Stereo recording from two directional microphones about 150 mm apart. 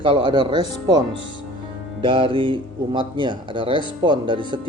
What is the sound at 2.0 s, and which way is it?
A man's voice, 35° right (ahead or behind).